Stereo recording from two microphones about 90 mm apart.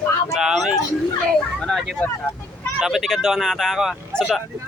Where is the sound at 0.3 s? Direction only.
5° right (ahead or behind).